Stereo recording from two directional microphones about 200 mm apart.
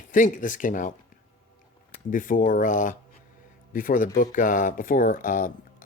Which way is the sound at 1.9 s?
40° left (ahead or behind).